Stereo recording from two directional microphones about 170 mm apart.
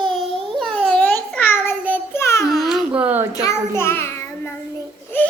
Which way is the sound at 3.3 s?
20° left (ahead or behind).